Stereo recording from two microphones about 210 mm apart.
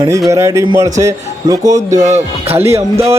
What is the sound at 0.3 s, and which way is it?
Speech, 15° right (ahead or behind).